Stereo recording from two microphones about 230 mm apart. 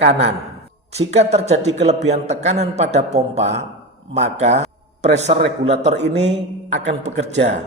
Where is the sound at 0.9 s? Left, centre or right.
Right.